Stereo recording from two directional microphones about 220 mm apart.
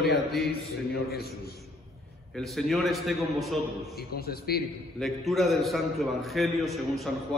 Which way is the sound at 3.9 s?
45° left (ahead or behind).